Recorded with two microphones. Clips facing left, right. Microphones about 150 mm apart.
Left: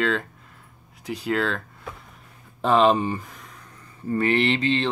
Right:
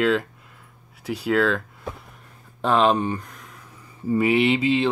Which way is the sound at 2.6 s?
Centre (ahead or behind).